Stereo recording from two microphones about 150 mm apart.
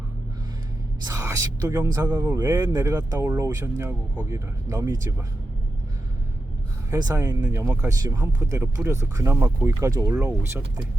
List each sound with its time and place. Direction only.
1.0 s speech: 20° right (ahead or behind)
6.9 s speech: 20° right (ahead or behind)